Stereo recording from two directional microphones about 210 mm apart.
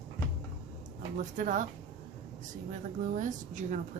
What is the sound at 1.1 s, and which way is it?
Speech, 35° right (ahead or behind).